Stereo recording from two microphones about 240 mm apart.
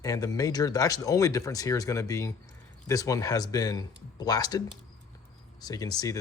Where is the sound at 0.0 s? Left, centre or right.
Centre.